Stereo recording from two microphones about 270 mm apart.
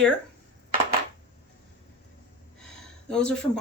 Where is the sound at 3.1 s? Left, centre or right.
Centre.